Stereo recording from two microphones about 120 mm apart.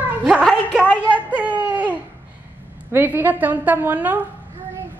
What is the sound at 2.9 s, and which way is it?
A woman's voice, 20° right (ahead or behind).